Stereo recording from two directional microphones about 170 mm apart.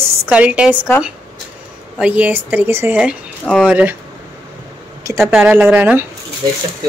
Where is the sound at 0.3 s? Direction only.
10° right (ahead or behind).